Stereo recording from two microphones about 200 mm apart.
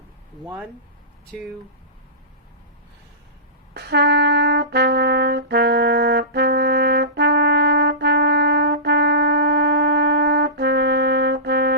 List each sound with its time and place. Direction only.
1.3 s speech: centre (ahead or behind)
3.8 s brass instrument: 55° right (ahead or behind)